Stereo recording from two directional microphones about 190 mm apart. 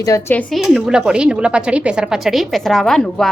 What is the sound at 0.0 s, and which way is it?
Speech, 15° left (ahead or behind).